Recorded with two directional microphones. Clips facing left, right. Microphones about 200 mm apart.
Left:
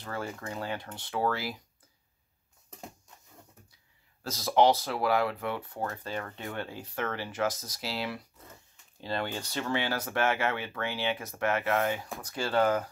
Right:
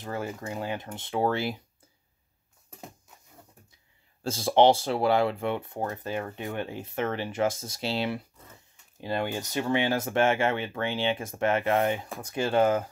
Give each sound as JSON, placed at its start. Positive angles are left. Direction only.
{"t": 0.0, "sound": "speech", "side_deg": -20}
{"t": 4.2, "sound": "speech", "side_deg": -30}
{"t": 6.0, "sound": "speech", "side_deg": -15}
{"t": 9.0, "sound": "speech", "side_deg": -15}